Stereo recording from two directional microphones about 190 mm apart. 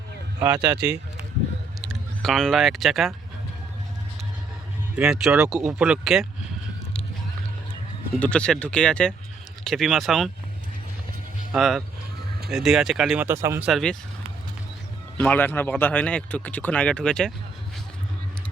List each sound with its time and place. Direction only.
0.4 s speech: 15° right (ahead or behind)
1.9 s speech: centre (ahead or behind)
4.9 s speech: 5° right (ahead or behind)
8.2 s speech: 5° left (ahead or behind)
11.5 s speech: centre (ahead or behind)
15.2 s speech: 10° left (ahead or behind)